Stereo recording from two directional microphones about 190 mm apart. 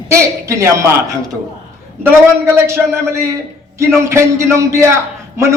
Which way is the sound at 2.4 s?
15° right (ahead or behind).